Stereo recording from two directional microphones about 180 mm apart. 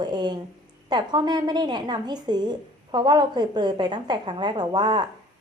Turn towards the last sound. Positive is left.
turn(degrees=-25)  # may be behind; listen again after turning